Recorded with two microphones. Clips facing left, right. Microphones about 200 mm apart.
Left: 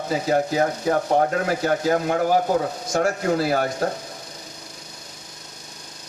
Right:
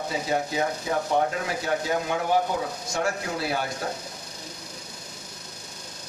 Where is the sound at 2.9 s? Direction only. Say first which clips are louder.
Left 8 dB; 60° left (ahead or behind).